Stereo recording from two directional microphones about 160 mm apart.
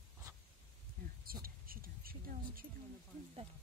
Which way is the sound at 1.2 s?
65° right (ahead or behind).